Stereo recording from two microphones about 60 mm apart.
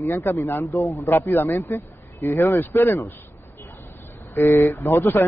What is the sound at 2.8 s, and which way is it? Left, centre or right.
Speech, left.